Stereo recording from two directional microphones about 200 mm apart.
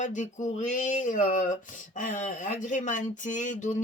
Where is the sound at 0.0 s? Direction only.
40° left (ahead or behind).